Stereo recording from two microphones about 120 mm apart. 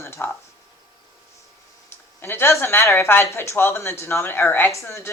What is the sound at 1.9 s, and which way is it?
Speech, 20° left (ahead or behind).